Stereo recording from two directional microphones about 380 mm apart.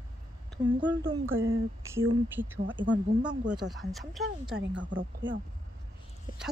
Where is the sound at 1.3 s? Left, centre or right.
Right.